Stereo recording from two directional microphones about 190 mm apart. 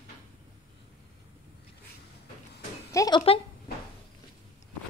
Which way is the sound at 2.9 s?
20° left (ahead or behind).